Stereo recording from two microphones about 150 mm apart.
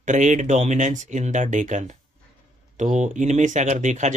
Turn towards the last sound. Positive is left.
turn(degrees=-55)  # may be behind; listen again after turning